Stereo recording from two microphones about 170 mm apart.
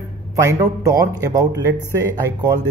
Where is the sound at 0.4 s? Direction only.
20° right (ahead or behind).